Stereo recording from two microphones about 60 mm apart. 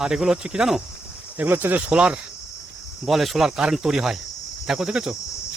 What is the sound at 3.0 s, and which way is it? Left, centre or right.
Cricket, centre.